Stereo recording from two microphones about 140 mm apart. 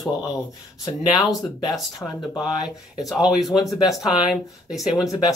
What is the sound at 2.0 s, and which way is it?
Speech, 15° left (ahead or behind).